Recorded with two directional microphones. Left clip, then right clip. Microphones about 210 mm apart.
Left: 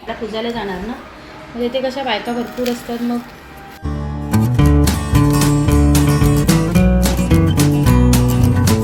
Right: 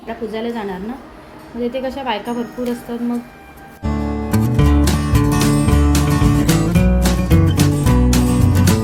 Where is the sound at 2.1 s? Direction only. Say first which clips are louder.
Left 2 dB; centre (ahead or behind).